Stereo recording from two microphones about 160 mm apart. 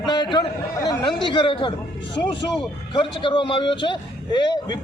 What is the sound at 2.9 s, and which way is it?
A man's voice, 30° left (ahead or behind).